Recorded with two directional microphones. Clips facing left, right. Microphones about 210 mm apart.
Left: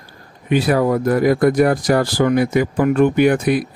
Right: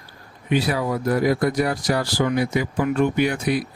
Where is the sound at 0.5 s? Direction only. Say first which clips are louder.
Left 6 dB; 50° left (ahead or behind).